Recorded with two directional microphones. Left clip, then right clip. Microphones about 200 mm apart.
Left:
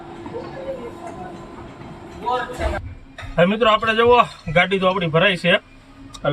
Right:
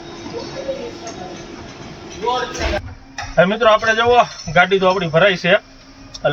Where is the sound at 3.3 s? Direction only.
10° left (ahead or behind).